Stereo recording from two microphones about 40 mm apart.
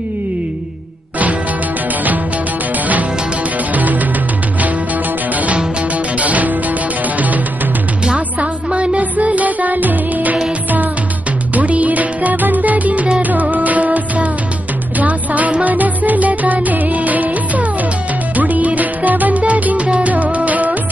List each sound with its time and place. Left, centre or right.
3.7 s music: right
5.3 s music: right
8.4 s music: right
11.5 s music: right